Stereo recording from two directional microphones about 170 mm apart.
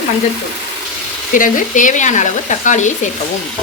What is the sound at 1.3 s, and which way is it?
Speech, 50° left (ahead or behind).